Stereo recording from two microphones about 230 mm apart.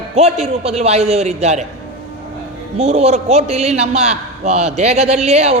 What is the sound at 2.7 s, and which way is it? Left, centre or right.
A man's voice, right.